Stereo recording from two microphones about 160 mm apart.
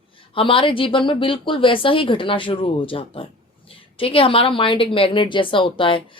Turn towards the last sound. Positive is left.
turn(degrees=30)  # may be behind; listen again after turning